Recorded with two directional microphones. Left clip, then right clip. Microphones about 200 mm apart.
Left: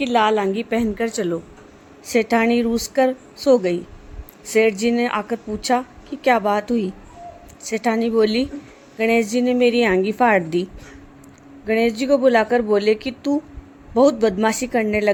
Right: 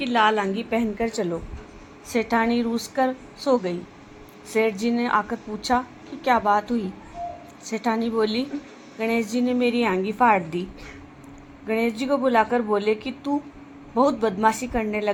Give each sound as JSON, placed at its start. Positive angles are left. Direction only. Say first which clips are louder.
{"t": 0.0, "sound": "a woman's voice", "louder": "left 3 dB", "side_deg": 60}
{"t": 2.1, "sound": "a woman's voice", "louder": "left 5 dB", "side_deg": 60}
{"t": 4.9, "sound": "a woman's voice", "louder": "left 2 dB", "side_deg": 60}
{"t": 11.7, "sound": "a woman's voice", "louder": "left 6 dB", "side_deg": 55}